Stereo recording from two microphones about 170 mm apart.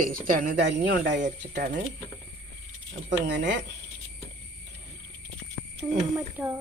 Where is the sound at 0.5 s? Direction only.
90° right.